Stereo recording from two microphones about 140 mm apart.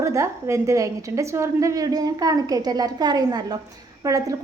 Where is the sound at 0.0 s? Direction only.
20° right (ahead or behind).